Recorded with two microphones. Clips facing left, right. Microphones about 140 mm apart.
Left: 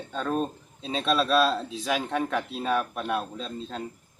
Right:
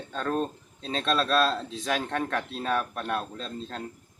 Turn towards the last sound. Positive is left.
turn(degrees=5)  # may be behind; listen again after turning